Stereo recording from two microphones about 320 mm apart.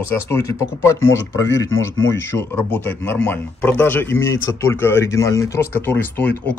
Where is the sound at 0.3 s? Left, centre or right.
Centre.